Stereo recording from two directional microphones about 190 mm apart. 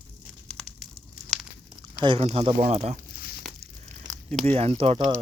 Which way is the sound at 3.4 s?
Centre (ahead or behind).